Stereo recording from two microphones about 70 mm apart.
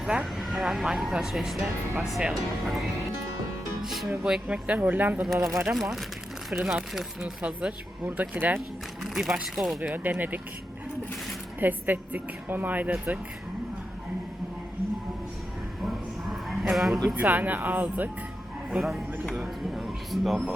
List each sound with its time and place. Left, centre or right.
0.0 s speech: centre
3.8 s speech: centre; by 5.2 s right
5.2 s speech: centre
8.0 s speech: right
9.0 s speech: centre
9.9 s speech: right
11.6 s speech: right
16.6 s speech: centre
17.3 s speech: right
18.8 s speech: centre
19.4 s a sound: centre